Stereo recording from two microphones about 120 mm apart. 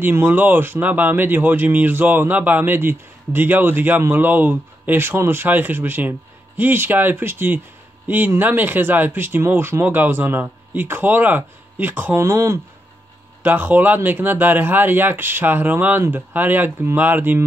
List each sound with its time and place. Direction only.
0.0 s speech: 15° right (ahead or behind)